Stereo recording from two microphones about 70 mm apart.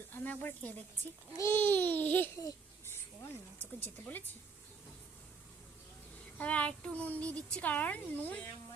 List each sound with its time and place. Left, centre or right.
0.1 s speech: left
1.4 s a woman's voice: left
3.6 s a woman's voice: left
6.3 s a woman's voice: centre